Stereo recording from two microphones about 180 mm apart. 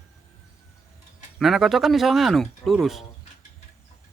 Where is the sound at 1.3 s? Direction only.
Centre (ahead or behind).